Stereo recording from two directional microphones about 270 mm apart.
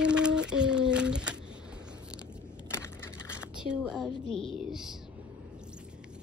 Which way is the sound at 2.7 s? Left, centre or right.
Centre.